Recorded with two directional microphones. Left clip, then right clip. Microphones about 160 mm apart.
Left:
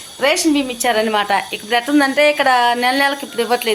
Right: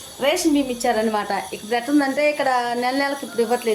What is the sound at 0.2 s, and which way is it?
A woman's voice, 20° left (ahead or behind).